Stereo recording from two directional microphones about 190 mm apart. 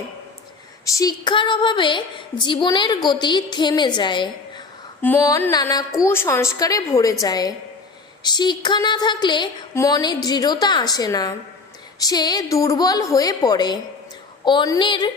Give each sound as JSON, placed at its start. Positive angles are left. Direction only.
{"t": 0.9, "sound": "a woman's voice", "side_deg": 20}